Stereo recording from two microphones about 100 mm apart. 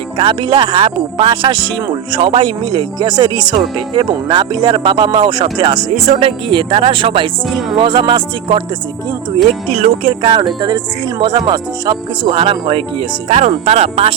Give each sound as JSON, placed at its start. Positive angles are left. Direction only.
{"t": 0.2, "sound": "speech", "side_deg": -55}
{"t": 6.1, "sound": "speech", "side_deg": -70}
{"t": 9.7, "sound": "speech", "side_deg": -65}
{"t": 12.2, "sound": "speech", "side_deg": -65}
{"t": 13.2, "sound": "speech", "side_deg": -90}